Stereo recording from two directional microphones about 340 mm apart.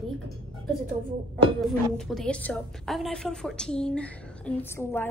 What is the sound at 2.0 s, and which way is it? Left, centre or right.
A woman's voice, centre.